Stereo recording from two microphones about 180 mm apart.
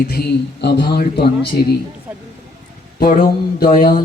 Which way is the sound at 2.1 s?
10° right (ahead or behind).